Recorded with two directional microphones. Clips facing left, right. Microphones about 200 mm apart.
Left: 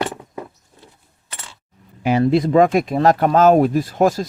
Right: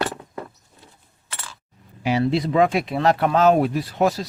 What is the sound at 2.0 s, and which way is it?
Speech, 50° left (ahead or behind).